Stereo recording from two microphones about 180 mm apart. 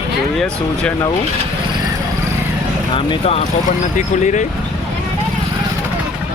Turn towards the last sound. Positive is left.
turn(degrees=40)  # may be behind; listen again after turning